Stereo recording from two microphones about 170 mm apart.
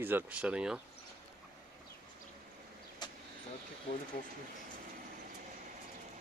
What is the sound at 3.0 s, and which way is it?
Vehicle, 25° left (ahead or behind).